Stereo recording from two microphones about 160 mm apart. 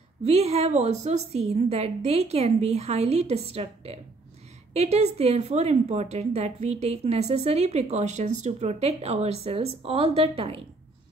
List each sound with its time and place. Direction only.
0.2 s speech: 40° right (ahead or behind)